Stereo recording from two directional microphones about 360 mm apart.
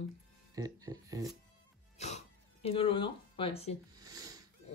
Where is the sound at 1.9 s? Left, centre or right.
Centre.